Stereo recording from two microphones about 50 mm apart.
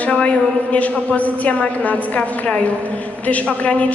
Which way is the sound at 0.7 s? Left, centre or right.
Left.